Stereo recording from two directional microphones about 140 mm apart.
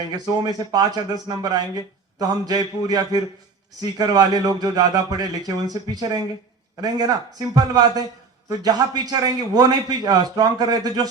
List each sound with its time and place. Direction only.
0.0 s speech: 25° right (ahead or behind)